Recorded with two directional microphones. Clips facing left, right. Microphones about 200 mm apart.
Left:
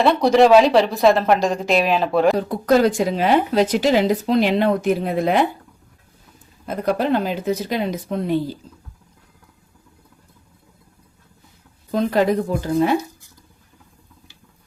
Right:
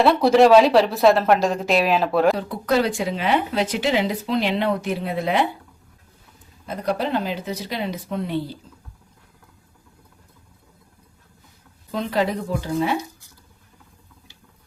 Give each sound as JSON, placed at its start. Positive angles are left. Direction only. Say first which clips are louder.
{"t": 0.0, "sound": "speech", "louder": "even", "side_deg": -5}
{"t": 2.5, "sound": "speech", "louder": "left 5 dB", "side_deg": 45}
{"t": 6.8, "sound": "speech", "louder": "left 4 dB", "side_deg": 50}
{"t": 11.9, "sound": "speech", "louder": "left 5 dB", "side_deg": 45}